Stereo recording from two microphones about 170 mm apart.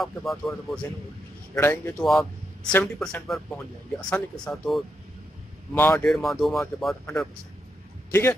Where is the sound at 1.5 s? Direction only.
15° left (ahead or behind).